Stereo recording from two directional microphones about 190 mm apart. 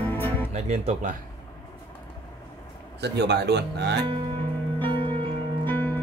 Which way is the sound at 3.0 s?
60° right (ahead or behind).